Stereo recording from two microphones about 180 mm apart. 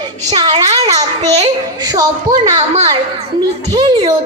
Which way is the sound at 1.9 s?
20° right (ahead or behind).